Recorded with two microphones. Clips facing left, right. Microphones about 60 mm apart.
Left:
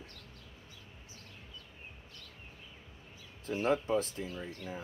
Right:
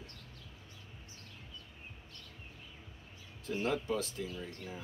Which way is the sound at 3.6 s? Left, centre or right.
Left.